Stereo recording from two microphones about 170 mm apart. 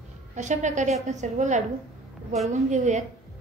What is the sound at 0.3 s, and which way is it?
A woman's voice, 45° right (ahead or behind).